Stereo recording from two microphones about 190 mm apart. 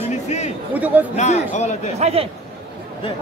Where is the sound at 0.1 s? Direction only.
35° left (ahead or behind).